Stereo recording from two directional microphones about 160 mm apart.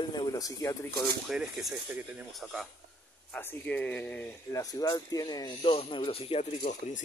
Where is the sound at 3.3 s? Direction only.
10° left (ahead or behind); by 6.4 s 35° left (ahead or behind).